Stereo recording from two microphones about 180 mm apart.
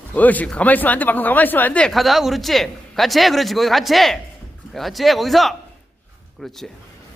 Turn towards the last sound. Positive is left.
turn(degrees=0)  # may be behind; listen again after turning